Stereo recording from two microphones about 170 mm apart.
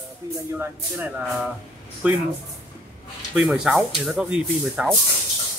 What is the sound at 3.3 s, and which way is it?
Speech, 5° right (ahead or behind).